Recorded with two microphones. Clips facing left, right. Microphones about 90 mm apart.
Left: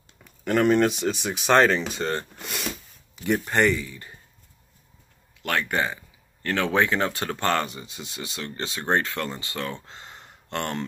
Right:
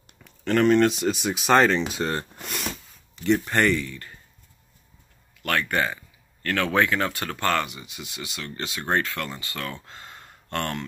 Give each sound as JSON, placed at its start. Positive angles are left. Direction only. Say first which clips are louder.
{"t": 0.2, "sound": "speech", "louder": "right 1 dB", "side_deg": 10}
{"t": 5.4, "sound": "speech", "louder": "right 1 dB", "side_deg": 20}